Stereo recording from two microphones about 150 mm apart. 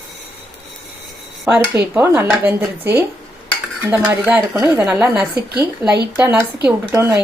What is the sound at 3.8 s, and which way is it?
Speech, 15° right (ahead or behind).